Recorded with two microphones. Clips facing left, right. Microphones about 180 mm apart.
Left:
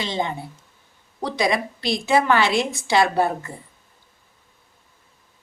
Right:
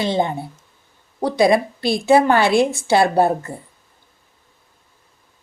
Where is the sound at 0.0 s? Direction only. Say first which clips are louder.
Right 6 dB; 55° right (ahead or behind).